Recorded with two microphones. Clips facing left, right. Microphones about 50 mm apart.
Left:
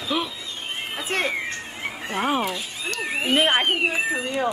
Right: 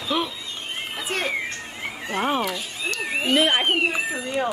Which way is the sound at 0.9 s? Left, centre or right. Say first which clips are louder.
Left 2 dB; left.